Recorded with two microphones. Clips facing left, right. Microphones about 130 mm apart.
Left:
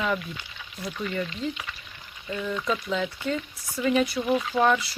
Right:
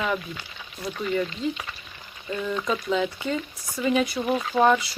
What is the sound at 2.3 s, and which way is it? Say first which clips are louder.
Speech: right 1 dB; centre (ahead or behind).